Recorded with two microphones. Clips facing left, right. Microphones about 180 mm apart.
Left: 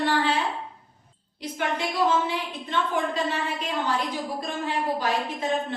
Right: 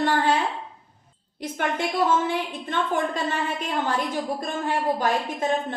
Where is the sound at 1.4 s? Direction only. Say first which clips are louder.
Right 2 dB; 50° right (ahead or behind).